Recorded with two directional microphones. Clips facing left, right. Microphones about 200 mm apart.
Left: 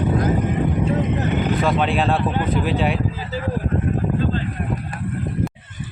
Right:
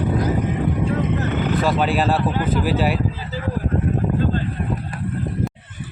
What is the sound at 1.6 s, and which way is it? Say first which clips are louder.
Speech: right 2 dB; 5° right (ahead or behind).